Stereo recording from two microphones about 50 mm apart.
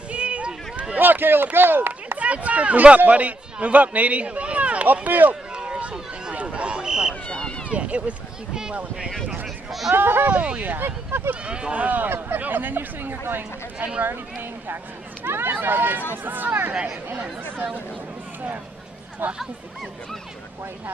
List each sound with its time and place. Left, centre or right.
0.1 s a sound: right
0.9 s speech: right
2.1 s a man's voice: right
5.3 s a sound: centre
7.2 s a sound: centre
7.7 s run: right
9.7 s speech: centre
9.9 s speech: right
10.3 s speech: right
10.6 s speech: right
11.4 s speech: right
15.2 s speech: right
19.2 s speech: right